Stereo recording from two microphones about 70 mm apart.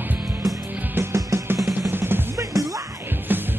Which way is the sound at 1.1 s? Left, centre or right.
Right.